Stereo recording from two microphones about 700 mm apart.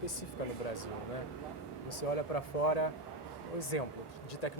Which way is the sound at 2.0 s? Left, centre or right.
Left.